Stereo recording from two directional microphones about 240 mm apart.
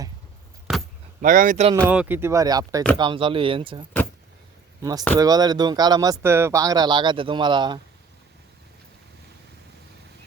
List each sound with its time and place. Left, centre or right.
0.7 s keys jangling: centre
1.2 s a man's voice: right
1.9 s speech: centre